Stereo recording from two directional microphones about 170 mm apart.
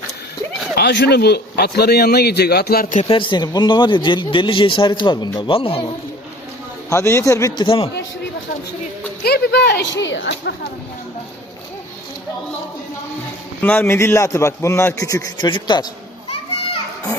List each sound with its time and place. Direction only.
0.8 s a man's voice: 75° left (ahead or behind)
3.1 s speech: 30° left (ahead or behind)
6.9 s a man's voice: 15° left (ahead or behind)
9.2 s a man's voice: 70° left (ahead or behind); by 10.5 s 90° left
13.6 s a man's voice: 10° left (ahead or behind); by 15.9 s 25° left (ahead or behind)